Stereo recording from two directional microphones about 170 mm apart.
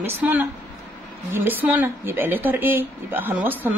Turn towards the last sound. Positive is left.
turn(degrees=-10)  # may be behind; listen again after turning